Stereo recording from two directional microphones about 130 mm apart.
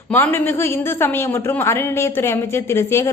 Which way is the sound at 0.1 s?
20° left (ahead or behind).